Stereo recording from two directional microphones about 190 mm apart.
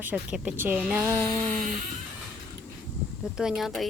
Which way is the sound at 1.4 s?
40° right (ahead or behind).